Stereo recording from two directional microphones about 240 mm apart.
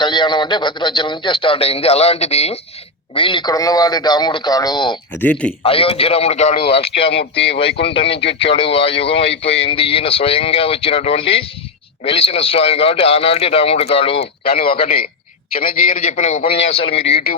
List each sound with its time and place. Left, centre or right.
0.0 s a man's voice: centre
5.2 s speech: centre
5.6 s a man's voice: left